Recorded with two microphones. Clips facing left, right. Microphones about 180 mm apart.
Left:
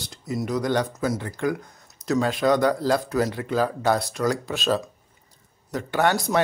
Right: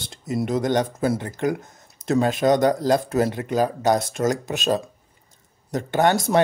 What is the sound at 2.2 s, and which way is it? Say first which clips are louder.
Speech: right 2 dB; 20° right (ahead or behind).